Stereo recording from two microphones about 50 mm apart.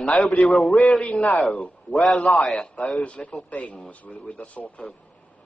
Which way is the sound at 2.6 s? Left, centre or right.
Left.